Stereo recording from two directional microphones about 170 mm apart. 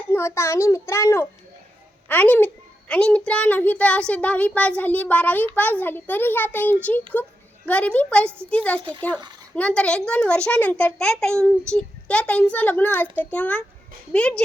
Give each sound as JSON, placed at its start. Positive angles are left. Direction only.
{"t": 0.1, "sound": "a child's voice", "side_deg": 15}
{"t": 8.8, "sound": "speech", "side_deg": -30}
{"t": 9.6, "sound": "a child's voice", "side_deg": 5}